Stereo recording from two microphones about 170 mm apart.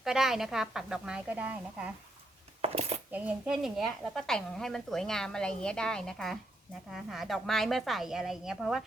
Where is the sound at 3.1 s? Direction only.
5° right (ahead or behind).